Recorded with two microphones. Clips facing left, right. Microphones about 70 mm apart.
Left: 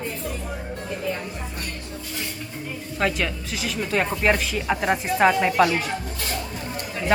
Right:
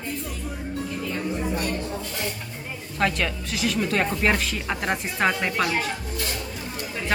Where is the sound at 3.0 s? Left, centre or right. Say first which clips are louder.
Even; centre.